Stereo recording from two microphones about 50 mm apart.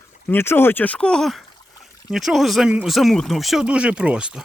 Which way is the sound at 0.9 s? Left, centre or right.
Centre.